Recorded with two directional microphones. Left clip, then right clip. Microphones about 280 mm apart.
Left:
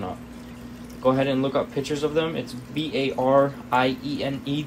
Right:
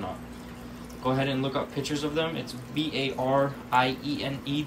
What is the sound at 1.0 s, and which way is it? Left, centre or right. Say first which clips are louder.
A man's voice: left 6 dB; centre.